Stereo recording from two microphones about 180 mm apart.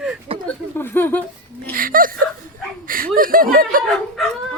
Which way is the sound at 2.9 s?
50° right (ahead or behind).